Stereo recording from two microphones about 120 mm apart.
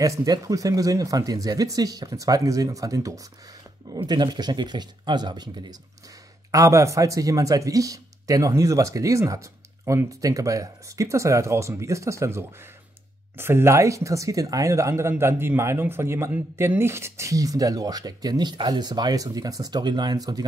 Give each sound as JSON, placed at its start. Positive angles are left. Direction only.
{"t": 0.0, "sound": "speech", "side_deg": -30}